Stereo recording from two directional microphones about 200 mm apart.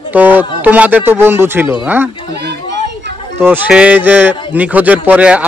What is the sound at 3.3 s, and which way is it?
A man's voice, 10° right (ahead or behind).